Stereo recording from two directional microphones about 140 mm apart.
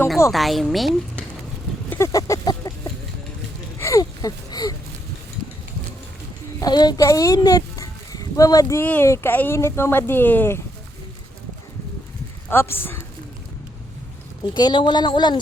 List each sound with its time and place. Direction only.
0.3 s speech: centre (ahead or behind)
1.9 s a sound: 20° left (ahead or behind)
3.8 s a sound: 20° left (ahead or behind)
6.6 s speech: 30° left (ahead or behind)
12.5 s speech: 15° left (ahead or behind)
14.5 s speech: 35° left (ahead or behind)